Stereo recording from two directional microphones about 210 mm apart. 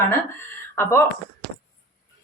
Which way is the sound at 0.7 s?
10° left (ahead or behind).